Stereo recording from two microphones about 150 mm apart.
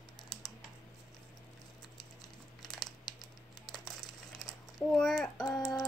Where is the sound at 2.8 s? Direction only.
30° left (ahead or behind).